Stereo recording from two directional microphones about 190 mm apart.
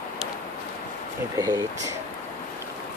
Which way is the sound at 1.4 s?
20° right (ahead or behind).